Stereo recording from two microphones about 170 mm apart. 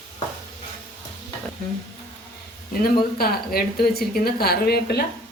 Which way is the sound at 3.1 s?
65° left (ahead or behind).